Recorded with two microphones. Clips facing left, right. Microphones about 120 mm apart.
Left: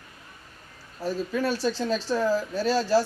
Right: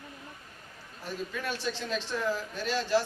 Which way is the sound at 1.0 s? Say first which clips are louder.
Left 9 dB; 35° left (ahead or behind).